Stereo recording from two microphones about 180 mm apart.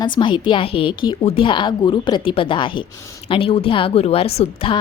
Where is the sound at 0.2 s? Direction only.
25° left (ahead or behind).